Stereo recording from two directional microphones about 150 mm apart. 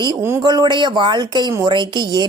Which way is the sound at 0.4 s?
30° right (ahead or behind).